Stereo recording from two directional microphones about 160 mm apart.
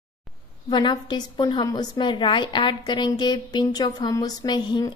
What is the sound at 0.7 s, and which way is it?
A woman's voice, 30° left (ahead or behind).